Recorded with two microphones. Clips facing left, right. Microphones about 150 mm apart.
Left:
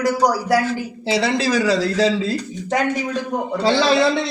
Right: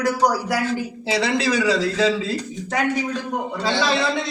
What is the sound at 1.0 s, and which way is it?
Speech, 35° left (ahead or behind).